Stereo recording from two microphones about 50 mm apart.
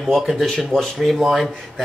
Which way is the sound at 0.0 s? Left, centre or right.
Centre.